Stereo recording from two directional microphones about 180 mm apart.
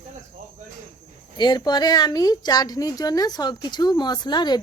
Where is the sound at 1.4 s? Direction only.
25° left (ahead or behind).